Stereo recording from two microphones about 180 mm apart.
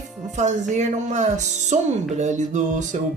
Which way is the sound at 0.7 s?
40° right (ahead or behind).